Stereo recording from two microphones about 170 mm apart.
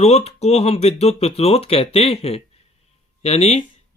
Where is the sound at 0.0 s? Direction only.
40° left (ahead or behind).